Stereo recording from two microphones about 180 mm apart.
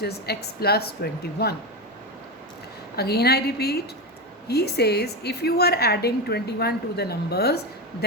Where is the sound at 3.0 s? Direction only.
60° left (ahead or behind).